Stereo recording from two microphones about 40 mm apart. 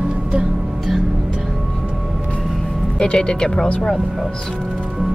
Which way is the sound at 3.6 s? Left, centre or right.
Left.